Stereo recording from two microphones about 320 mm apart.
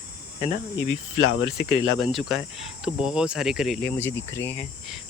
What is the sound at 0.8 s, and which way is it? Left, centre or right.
Speech, left.